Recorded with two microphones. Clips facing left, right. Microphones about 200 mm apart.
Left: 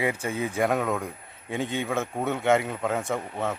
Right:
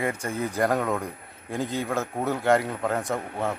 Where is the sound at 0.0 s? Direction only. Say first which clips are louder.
Left 1 dB; 5° left (ahead or behind).